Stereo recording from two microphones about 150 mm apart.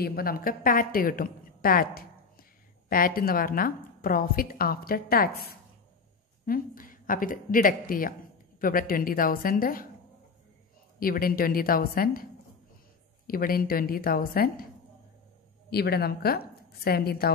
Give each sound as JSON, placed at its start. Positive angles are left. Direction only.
{"t": 0.0, "sound": "a woman's voice", "side_deg": 90}
{"t": 6.4, "sound": "a woman's voice", "side_deg": 70}
{"t": 11.0, "sound": "a woman's voice", "side_deg": 70}
{"t": 13.3, "sound": "a woman's voice", "side_deg": 75}
{"t": 15.7, "sound": "a woman's voice", "side_deg": 90}